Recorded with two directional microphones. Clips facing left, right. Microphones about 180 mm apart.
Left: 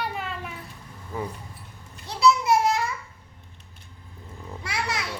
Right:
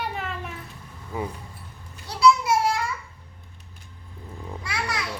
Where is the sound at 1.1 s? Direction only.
10° right (ahead or behind).